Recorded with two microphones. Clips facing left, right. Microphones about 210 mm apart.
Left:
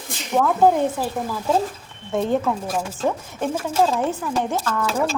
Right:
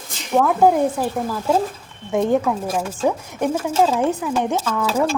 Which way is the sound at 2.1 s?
15° right (ahead or behind).